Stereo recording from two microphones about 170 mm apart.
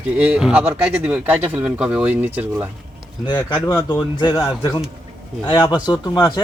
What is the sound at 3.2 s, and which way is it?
A man's voice, 25° left (ahead or behind).